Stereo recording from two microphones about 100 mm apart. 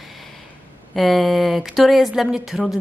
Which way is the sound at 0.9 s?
Centre (ahead or behind).